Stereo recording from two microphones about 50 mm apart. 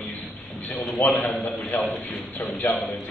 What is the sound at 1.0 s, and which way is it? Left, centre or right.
A man's voice, left.